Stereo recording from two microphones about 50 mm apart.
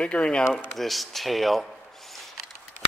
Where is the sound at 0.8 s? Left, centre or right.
Centre.